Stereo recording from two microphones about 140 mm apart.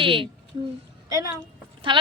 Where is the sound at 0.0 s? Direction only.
40° right (ahead or behind).